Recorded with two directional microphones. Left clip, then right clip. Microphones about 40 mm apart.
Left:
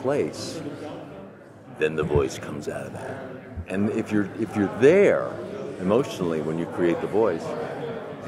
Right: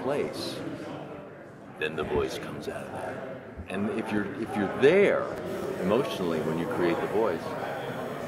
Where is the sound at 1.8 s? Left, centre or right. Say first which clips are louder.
Left 6 dB; left.